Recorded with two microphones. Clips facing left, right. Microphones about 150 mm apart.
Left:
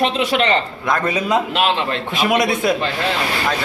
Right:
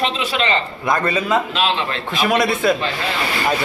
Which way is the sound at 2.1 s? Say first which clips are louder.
Even; 15° left (ahead or behind).